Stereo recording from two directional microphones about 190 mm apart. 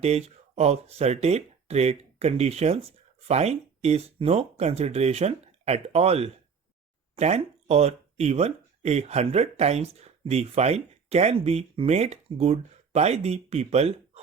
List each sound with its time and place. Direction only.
0.0 s speech: 35° right (ahead or behind)